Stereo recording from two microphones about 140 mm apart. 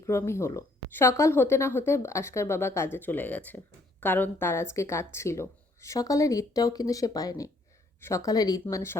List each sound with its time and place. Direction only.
0.0 s a woman's voice: 20° left (ahead or behind)